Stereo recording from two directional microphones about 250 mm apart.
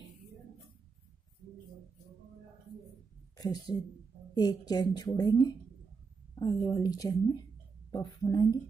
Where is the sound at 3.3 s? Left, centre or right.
Centre.